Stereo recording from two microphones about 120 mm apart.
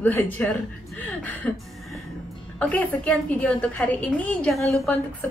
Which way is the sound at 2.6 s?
10° left (ahead or behind).